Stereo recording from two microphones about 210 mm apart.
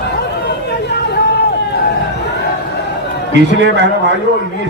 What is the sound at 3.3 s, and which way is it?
Speech, 55° right (ahead or behind).